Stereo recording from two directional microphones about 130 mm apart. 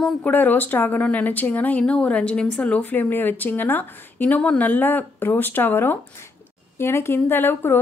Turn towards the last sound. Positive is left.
turn(degrees=15)  # may be behind; listen again after turning